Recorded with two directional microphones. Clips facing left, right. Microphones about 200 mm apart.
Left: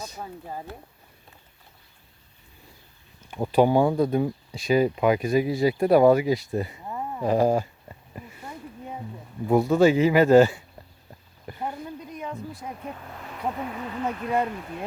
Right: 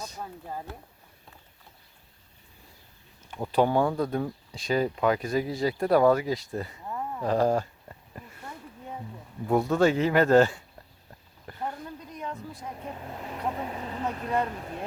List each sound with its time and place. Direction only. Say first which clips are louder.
0.0 s speech: left 2 dB; 10° left (ahead or behind)
3.2 s speech: left 4 dB; 10° left (ahead or behind)
11.4 s a sound: left 3 dB; 10° left (ahead or behind)
13.0 s speech: right 2 dB; 20° right (ahead or behind)
13.7 s speech: left 3 dB; 35° right (ahead or behind)
14.3 s speech: left 3 dB; 5° left (ahead or behind)